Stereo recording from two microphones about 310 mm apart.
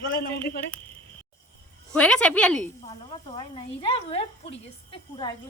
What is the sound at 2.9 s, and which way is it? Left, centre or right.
Speech, centre.